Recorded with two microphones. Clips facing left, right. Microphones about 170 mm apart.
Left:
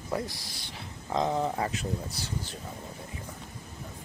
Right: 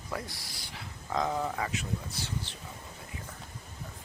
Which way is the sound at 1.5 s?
35° left (ahead or behind).